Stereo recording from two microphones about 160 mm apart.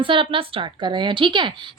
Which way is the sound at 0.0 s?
35° right (ahead or behind).